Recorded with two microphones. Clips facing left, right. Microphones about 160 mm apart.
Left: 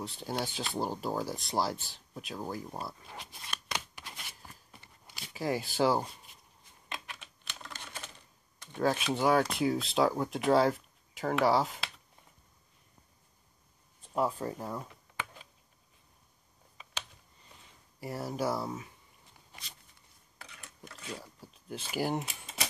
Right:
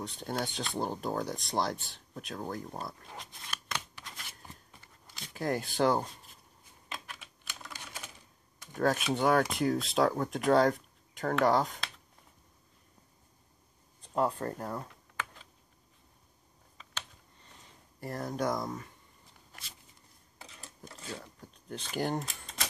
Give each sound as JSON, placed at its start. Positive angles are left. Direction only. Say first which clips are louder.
{"t": 0.0, "sound": "speech", "louder": "even", "side_deg": 0}
{"t": 6.9, "sound": "typing", "louder": "left 1 dB", "side_deg": -5}
{"t": 8.7, "sound": "speech", "louder": "right 1 dB", "side_deg": 0}
{"t": 14.0, "sound": "speech", "louder": "right 1 dB", "side_deg": 5}
{"t": 18.0, "sound": "speech", "louder": "even", "side_deg": 5}
{"t": 20.3, "sound": "a sound", "louder": "right 1 dB", "side_deg": -30}
{"t": 21.0, "sound": "typewriter", "louder": "even", "side_deg": 0}